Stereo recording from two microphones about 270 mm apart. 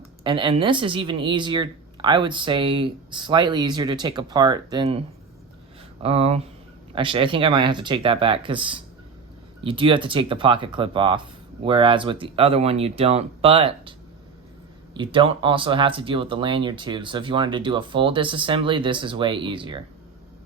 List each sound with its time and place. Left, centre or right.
0.3 s a woman's voice: centre
14.9 s speech: centre